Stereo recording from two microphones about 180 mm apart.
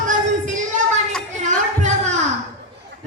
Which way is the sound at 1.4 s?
40° right (ahead or behind).